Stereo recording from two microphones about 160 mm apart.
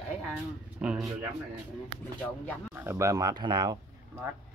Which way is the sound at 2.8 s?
15° right (ahead or behind).